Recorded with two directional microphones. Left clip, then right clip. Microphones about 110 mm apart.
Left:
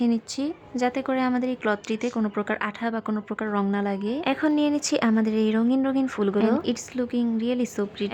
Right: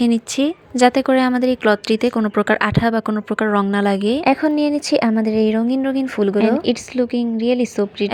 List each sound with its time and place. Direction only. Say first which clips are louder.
0.0 s a woman's voice: right 8 dB; 40° right (ahead or behind)
4.6 s speech: right 6 dB; 25° right (ahead or behind)
6.7 s a woman's voice: right 9 dB; 30° right (ahead or behind)